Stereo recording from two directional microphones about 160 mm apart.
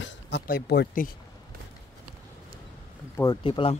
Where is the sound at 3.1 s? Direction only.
25° left (ahead or behind).